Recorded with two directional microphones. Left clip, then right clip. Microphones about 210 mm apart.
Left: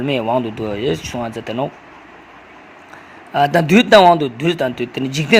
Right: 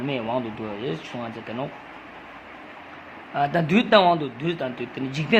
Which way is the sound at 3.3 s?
30° left (ahead or behind).